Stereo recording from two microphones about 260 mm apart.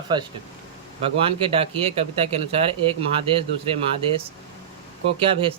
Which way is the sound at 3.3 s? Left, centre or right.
Right.